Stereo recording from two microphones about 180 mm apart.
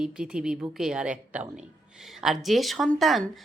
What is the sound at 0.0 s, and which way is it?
A woman's voice, 5° right (ahead or behind).